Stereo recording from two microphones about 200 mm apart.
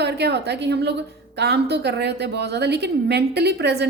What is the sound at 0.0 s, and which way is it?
A woman's voice, 55° right (ahead or behind).